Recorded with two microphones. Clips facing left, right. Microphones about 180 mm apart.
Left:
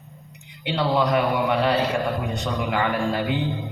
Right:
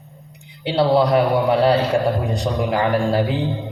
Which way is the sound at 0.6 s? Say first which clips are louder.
Right 6 dB; 35° right (ahead or behind).